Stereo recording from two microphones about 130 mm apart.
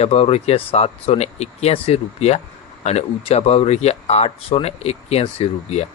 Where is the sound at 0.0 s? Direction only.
55° left (ahead or behind).